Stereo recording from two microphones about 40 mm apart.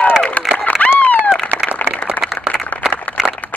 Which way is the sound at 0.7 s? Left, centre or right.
Left.